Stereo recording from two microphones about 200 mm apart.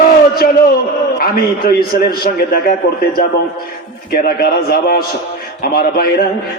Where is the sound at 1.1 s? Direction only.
50° left (ahead or behind).